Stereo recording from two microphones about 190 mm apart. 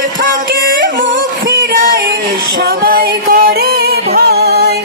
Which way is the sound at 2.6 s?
55° right (ahead or behind).